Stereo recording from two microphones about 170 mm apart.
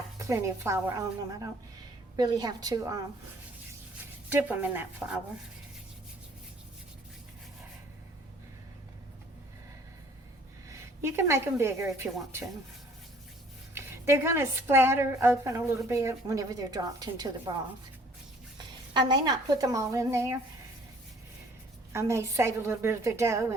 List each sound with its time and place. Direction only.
0.2 s a woman's voice: 15° right (ahead or behind)
4.3 s a woman's voice: 10° right (ahead or behind)
10.7 s a woman's voice: 15° right (ahead or behind)
13.7 s a woman's voice: 15° right (ahead or behind)
21.9 s a woman's voice: 15° right (ahead or behind)